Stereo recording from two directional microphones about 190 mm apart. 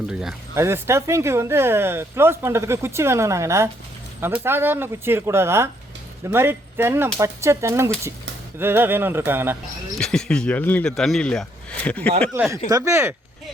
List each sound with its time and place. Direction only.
0.1 s speech: 5° right (ahead or behind)
0.5 s speech: 15° right (ahead or behind)
9.9 s speech: 5° left (ahead or behind)
12.3 s speech: 15° right (ahead or behind)